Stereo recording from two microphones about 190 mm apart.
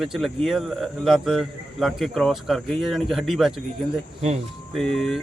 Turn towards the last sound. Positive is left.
turn(degrees=0)  # may be behind; listen again after turning